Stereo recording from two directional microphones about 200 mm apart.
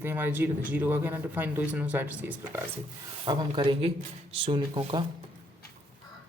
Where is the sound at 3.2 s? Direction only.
25° right (ahead or behind).